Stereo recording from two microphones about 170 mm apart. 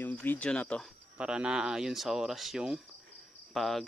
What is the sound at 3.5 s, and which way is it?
Cricket, centre (ahead or behind).